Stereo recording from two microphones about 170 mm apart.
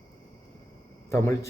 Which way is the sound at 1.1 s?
15° left (ahead or behind).